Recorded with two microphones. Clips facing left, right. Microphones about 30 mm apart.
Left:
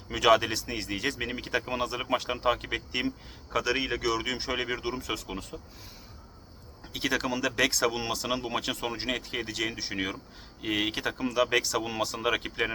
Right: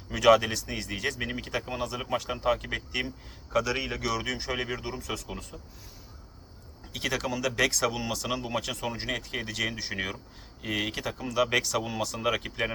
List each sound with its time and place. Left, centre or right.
0.3 s speech: centre
6.9 s speech: centre